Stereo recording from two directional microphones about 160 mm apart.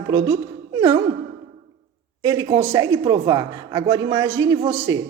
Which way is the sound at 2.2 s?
20° right (ahead or behind).